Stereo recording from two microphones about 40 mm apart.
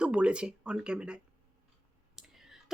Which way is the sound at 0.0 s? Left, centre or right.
Right.